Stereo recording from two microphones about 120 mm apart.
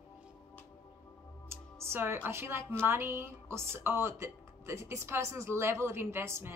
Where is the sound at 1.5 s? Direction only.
20° right (ahead or behind).